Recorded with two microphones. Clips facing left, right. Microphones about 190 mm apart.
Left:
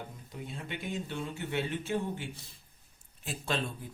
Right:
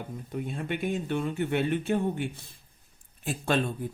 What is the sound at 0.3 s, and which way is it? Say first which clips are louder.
Speech: right 9 dB; 55° right (ahead or behind).